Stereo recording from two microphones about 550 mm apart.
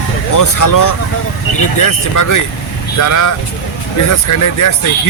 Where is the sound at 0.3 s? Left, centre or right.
Left.